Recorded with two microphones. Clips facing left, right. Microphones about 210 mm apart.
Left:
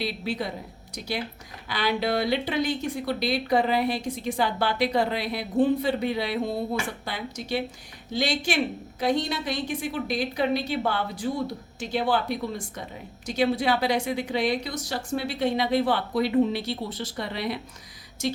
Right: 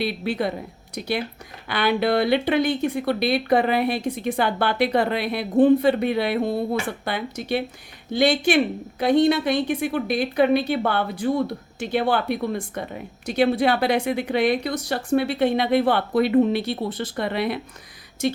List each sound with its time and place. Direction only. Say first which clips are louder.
0.0 s speech: right 5 dB; 60° right (ahead or behind)